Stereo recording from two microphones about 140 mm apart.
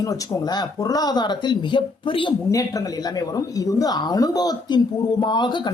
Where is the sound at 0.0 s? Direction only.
25° left (ahead or behind).